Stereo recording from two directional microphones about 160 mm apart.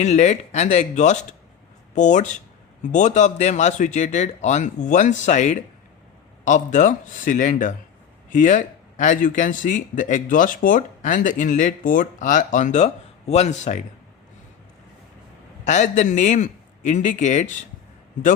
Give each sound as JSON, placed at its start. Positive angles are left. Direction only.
{"t": 0.0, "sound": "speech", "side_deg": 45}
{"t": 15.6, "sound": "speech", "side_deg": 50}